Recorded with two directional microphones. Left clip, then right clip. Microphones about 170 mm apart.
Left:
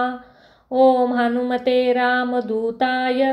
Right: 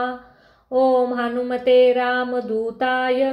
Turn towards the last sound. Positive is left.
turn(degrees=25)  # may be behind; listen again after turning